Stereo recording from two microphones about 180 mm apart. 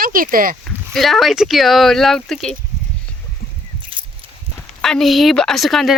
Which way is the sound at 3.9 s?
30° right (ahead or behind).